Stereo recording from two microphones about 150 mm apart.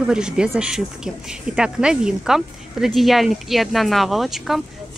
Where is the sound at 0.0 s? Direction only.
5° right (ahead or behind).